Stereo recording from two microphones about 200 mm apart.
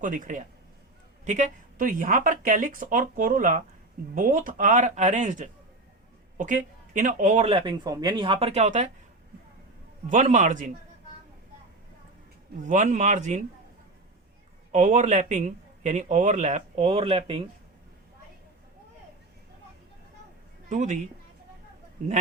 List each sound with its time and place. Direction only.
0.0 s a man's voice: 40° right (ahead or behind)
10.1 s a man's voice: 40° right (ahead or behind)
12.6 s a man's voice: 40° right (ahead or behind)
14.7 s a man's voice: 35° right (ahead or behind)
20.7 s a man's voice: 40° right (ahead or behind)